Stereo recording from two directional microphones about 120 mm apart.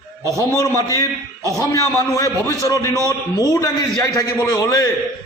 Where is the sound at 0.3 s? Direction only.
30° left (ahead or behind).